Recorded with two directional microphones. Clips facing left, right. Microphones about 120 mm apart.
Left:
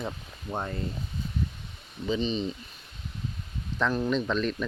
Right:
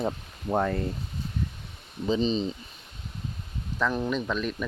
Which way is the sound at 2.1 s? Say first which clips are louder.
Right 3 dB; 35° right (ahead or behind).